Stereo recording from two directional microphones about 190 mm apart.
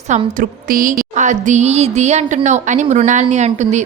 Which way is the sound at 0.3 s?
45° right (ahead or behind).